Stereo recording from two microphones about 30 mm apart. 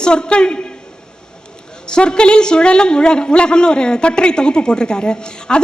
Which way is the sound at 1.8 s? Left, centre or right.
Left.